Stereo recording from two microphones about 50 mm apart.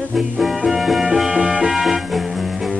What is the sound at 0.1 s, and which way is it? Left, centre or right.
Music, centre.